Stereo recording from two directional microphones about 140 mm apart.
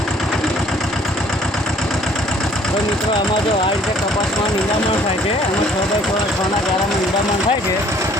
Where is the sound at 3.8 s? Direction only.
Centre (ahead or behind).